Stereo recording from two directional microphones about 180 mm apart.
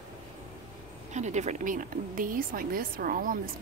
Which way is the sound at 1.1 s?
40° right (ahead or behind).